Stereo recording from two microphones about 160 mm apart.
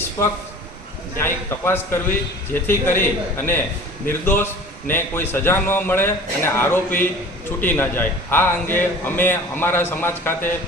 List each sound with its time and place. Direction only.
0.2 s a man's voice: 15° left (ahead or behind)